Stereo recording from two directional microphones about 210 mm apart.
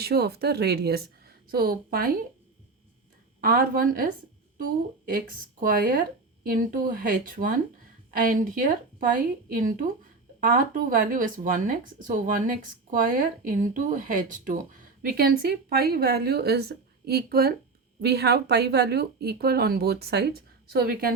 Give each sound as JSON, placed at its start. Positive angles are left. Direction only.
{"t": 0.0, "sound": "a woman's voice", "side_deg": -50}
{"t": 3.4, "sound": "a woman's voice", "side_deg": -45}